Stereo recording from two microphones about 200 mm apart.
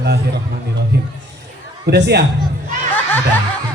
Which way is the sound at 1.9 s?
55° right (ahead or behind).